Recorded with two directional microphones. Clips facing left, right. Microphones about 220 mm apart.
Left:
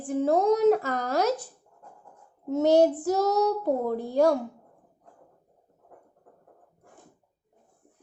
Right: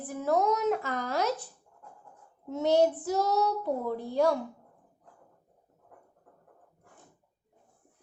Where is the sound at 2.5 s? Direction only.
45° left (ahead or behind).